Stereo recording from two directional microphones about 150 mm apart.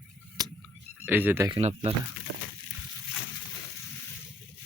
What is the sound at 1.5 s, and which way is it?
Speech, 40° right (ahead or behind).